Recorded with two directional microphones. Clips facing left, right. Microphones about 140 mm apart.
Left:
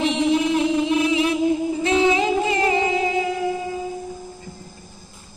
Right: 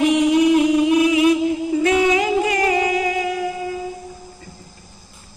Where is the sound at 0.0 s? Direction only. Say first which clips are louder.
Right 5 dB; 15° right (ahead or behind).